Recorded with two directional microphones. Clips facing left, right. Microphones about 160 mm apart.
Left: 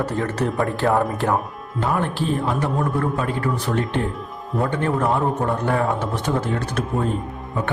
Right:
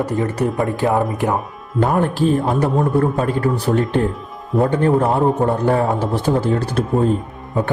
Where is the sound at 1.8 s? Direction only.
45° right (ahead or behind).